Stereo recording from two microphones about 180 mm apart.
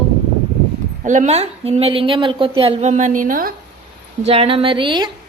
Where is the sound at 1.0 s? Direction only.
45° right (ahead or behind).